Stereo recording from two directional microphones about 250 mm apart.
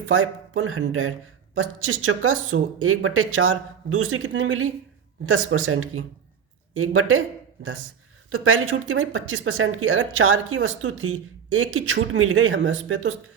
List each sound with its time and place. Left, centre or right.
0.1 s speech: right
8.3 s speech: right